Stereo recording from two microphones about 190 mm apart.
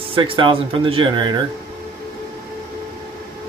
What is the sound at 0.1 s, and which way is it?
Speech, 25° right (ahead or behind).